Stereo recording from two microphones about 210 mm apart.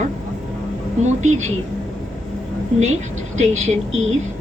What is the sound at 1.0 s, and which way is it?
Speech, 35° right (ahead or behind).